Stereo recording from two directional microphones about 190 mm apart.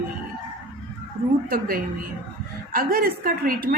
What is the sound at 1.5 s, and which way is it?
A woman's voice, 50° right (ahead or behind).